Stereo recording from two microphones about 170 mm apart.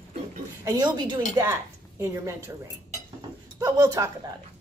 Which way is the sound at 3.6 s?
20° right (ahead or behind).